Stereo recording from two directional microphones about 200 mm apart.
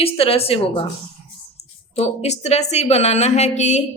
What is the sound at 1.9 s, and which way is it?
Speech, 30° left (ahead or behind).